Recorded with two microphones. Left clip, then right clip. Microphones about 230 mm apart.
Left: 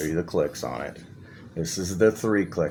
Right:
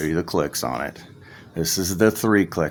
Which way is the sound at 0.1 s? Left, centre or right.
Right.